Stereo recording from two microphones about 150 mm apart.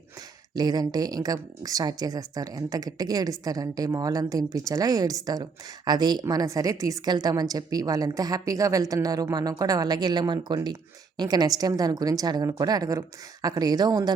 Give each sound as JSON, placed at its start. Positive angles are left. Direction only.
{"t": 0.5, "sound": "a woman's voice", "side_deg": -25}